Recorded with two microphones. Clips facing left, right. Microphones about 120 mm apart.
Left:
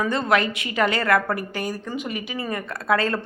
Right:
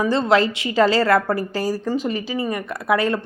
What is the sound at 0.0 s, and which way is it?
A woman's voice, 25° right (ahead or behind).